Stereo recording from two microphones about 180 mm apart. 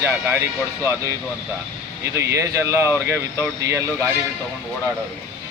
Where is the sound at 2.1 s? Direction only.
15° right (ahead or behind).